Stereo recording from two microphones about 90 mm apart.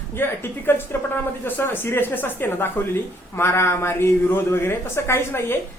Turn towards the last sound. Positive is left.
turn(degrees=30)  # may be behind; listen again after turning